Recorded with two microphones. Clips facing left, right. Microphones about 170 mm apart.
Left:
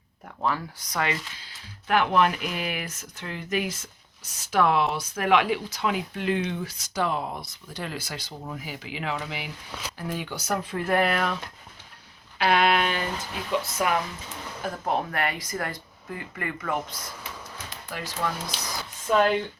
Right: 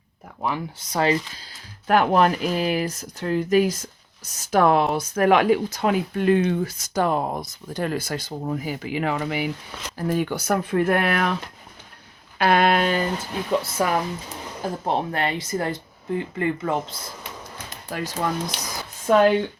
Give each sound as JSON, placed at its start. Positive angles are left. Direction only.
{"t": 0.4, "sound": "speech", "side_deg": -20}
{"t": 12.4, "sound": "speech", "side_deg": -45}
{"t": 17.8, "sound": "speech", "side_deg": -40}
{"t": 19.1, "sound": "speech", "side_deg": -55}